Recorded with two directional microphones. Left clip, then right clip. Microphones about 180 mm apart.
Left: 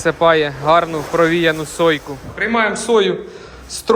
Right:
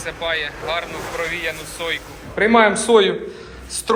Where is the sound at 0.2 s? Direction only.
55° left (ahead or behind).